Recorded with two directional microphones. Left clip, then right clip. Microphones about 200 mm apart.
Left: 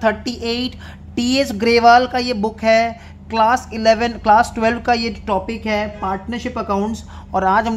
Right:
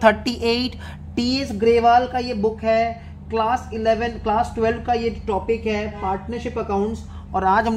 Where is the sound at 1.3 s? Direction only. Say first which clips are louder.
Left 3 dB; 25° left (ahead or behind); by 7.0 s 45° left (ahead or behind).